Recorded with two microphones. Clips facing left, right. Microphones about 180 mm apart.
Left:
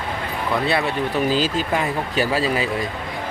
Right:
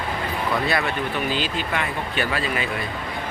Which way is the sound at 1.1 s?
40° left (ahead or behind).